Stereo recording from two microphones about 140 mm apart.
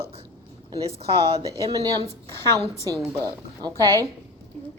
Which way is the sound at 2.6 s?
20° left (ahead or behind).